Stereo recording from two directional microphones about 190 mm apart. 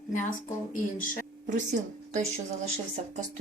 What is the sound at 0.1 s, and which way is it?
Speech, 45° left (ahead or behind).